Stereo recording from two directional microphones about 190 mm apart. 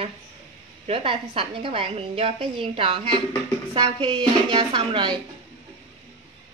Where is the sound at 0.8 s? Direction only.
30° right (ahead or behind).